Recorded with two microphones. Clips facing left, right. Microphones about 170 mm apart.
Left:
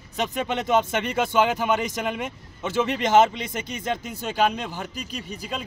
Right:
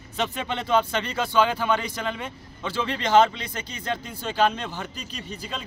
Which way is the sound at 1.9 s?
15° left (ahead or behind).